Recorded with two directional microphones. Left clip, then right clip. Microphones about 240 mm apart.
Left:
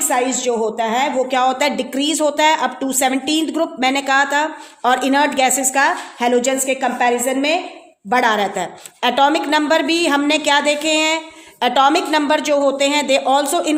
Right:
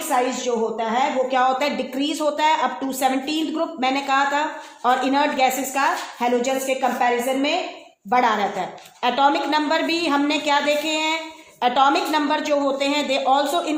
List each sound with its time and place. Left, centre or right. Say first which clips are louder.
0.1 s a woman's voice: left 2 dB; left